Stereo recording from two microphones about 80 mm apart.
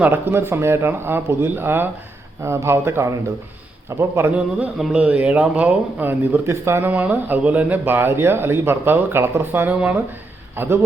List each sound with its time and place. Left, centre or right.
0.0 s speech: right
4.8 s speech: centre
6.4 s speech: right